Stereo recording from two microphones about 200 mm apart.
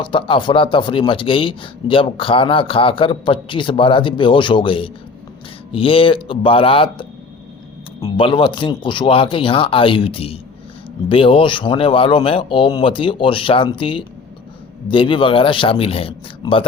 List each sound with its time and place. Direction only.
0.0 s speech: 25° left (ahead or behind)
8.0 s speech: 25° left (ahead or behind)